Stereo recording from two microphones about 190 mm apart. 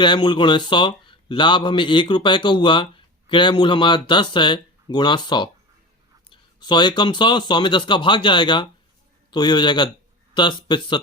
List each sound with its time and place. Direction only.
0.0 s speech: 25° left (ahead or behind)